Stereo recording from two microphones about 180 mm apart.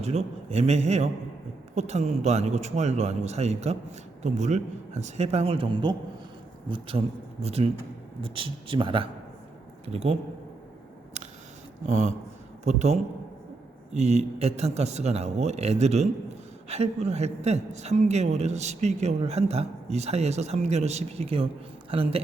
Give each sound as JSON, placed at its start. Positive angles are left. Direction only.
{"t": 0.0, "sound": "a man's voice", "side_deg": -35}
{"t": 11.9, "sound": "a man's voice", "side_deg": -40}